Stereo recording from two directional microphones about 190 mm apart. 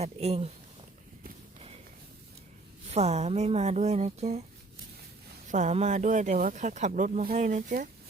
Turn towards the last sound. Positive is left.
turn(degrees=-40)  # may be behind; listen again after turning